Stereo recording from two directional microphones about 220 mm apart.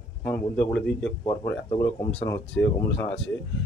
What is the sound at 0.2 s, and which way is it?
Speech, 5° left (ahead or behind).